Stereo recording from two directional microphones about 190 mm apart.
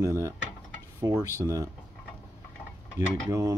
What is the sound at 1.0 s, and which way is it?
Speech, 15° right (ahead or behind).